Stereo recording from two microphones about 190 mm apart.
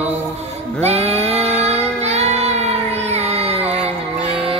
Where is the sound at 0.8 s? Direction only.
35° right (ahead or behind).